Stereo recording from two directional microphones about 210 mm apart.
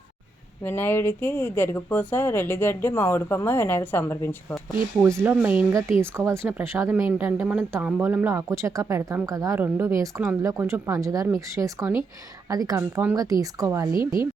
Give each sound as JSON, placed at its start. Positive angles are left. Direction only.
{"t": 0.6, "sound": "speech", "side_deg": 10}
{"t": 5.0, "sound": "speech", "side_deg": -10}